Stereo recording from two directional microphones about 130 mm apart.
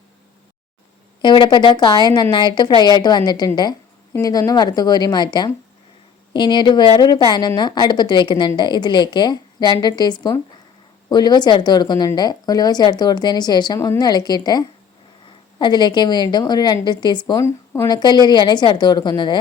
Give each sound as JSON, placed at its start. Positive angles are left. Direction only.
{"t": 1.2, "sound": "a woman's voice", "side_deg": 35}
{"t": 13.7, "sound": "a woman's voice", "side_deg": 20}
{"t": 14.0, "sound": "a woman's voice", "side_deg": 30}